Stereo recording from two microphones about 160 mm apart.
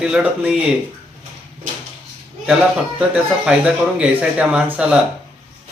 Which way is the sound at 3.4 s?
5° right (ahead or behind).